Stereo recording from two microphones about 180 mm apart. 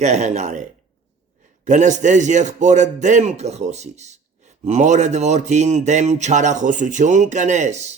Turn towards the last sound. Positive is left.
turn(degrees=-40)  # may be behind; listen again after turning